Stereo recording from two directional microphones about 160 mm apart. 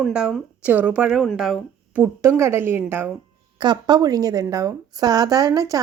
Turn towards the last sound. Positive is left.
turn(degrees=-25)  # may be behind; listen again after turning